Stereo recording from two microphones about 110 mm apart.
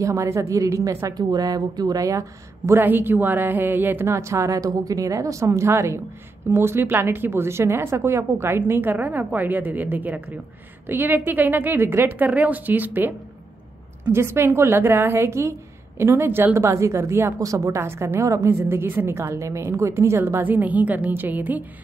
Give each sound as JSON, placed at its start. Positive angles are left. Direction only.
{"t": 0.0, "sound": "a woman's voice", "side_deg": -30}
{"t": 14.1, "sound": "a woman's voice", "side_deg": -20}